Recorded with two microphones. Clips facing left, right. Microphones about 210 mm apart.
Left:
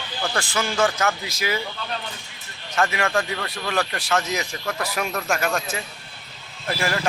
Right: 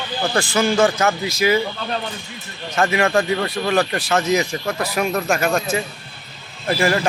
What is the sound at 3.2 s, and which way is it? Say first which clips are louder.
Speech: right 8 dB; 30° right (ahead or behind).